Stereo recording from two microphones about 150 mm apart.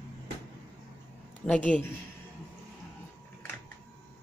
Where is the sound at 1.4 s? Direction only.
10° left (ahead or behind).